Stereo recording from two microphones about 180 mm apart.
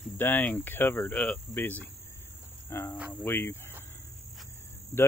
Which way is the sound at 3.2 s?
10° left (ahead or behind).